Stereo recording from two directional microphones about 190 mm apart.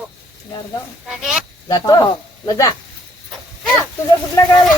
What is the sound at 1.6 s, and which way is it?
Speech, 20° left (ahead or behind).